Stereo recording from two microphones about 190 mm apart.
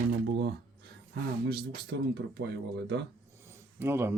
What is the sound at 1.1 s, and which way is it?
Speech, 55° right (ahead or behind).